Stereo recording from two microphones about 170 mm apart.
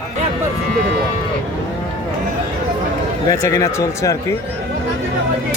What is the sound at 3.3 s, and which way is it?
Speech, 15° left (ahead or behind).